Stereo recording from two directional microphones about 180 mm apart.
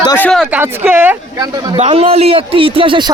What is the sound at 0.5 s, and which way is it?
Speech, 10° right (ahead or behind).